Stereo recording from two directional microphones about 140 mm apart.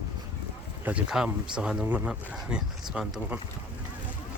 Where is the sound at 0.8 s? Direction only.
5° right (ahead or behind).